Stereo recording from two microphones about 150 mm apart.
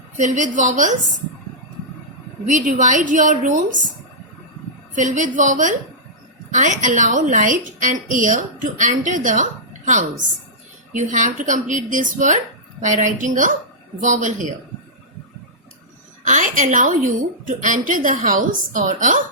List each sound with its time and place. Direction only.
0.2 s a woman's voice: 55° right (ahead or behind)
2.5 s a woman's voice: 55° right (ahead or behind)
4.9 s a woman's voice: 55° right (ahead or behind)
16.2 s a woman's voice: 55° right (ahead or behind)